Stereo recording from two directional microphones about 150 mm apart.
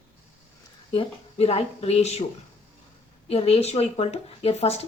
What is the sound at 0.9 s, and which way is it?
Speech, 40° left (ahead or behind).